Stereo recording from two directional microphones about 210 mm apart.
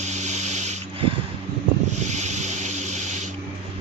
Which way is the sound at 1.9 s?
90° right.